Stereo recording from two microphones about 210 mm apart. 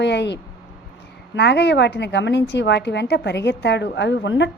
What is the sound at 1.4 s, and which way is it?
A woman's voice, 55° left (ahead or behind).